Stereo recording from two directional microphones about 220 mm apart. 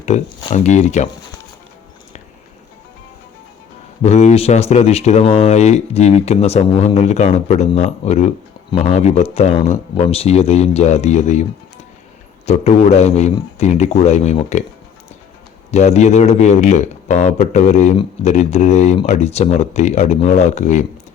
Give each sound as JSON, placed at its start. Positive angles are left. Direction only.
{"t": 0.0, "sound": "speech", "side_deg": 30}
{"t": 4.0, "sound": "speech", "side_deg": 30}
{"t": 12.5, "sound": "speech", "side_deg": 30}
{"t": 15.7, "sound": "speech", "side_deg": 30}